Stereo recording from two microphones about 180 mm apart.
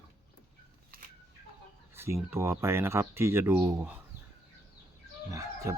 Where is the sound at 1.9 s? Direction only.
15° right (ahead or behind).